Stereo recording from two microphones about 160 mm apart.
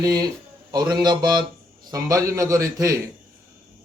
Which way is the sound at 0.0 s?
25° right (ahead or behind).